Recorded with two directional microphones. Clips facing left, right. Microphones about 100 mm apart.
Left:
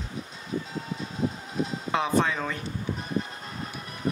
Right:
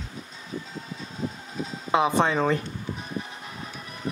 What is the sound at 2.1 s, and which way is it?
Speech, 30° right (ahead or behind).